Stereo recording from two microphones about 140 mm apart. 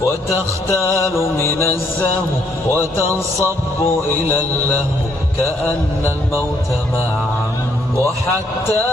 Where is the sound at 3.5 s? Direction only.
15° left (ahead or behind).